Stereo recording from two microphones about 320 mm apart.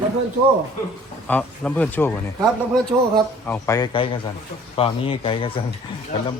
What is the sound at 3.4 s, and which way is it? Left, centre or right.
Speech, centre.